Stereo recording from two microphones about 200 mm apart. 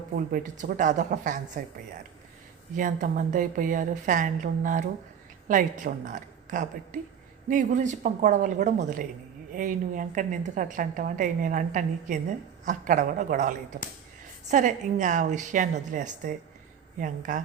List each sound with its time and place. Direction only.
0.3 s a woman's voice: 40° right (ahead or behind)
2.7 s a woman's voice: 40° right (ahead or behind)